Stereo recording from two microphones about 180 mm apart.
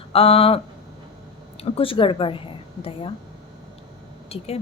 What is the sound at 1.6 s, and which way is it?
A woman's voice, 30° left (ahead or behind).